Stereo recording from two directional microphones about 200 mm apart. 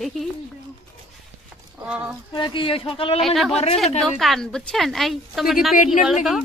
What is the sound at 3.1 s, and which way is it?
Speech, centre (ahead or behind).